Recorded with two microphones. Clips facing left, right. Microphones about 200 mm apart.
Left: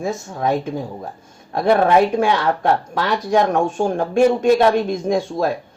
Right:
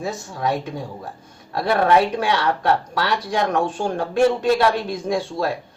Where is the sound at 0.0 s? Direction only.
20° left (ahead or behind).